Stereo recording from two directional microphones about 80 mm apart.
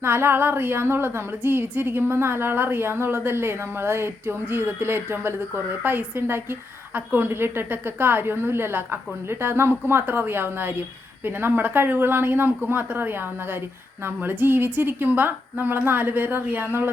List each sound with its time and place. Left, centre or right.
0.0 s a woman's voice: right